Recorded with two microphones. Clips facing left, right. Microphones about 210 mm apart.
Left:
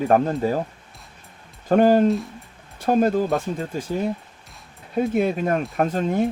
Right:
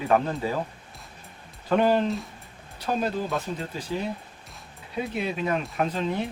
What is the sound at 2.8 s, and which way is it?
Speech, 50° left (ahead or behind).